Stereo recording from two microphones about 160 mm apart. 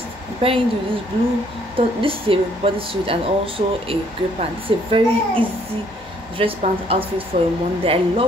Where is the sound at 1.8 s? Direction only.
35° right (ahead or behind).